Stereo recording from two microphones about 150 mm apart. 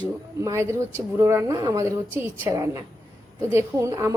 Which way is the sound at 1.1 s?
20° right (ahead or behind).